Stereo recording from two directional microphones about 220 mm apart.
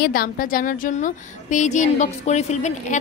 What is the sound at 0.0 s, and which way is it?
A woman's voice, 40° left (ahead or behind).